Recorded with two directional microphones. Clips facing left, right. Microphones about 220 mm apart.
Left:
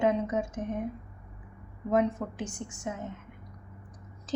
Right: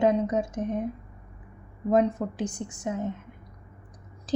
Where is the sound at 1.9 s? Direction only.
35° right (ahead or behind).